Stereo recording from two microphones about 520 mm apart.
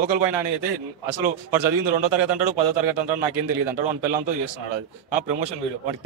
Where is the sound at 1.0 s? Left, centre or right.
Right.